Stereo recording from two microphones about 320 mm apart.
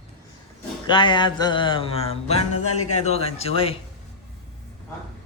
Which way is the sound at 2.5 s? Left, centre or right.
Left.